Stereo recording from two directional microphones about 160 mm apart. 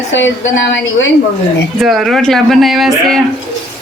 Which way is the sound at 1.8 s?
Centre (ahead or behind).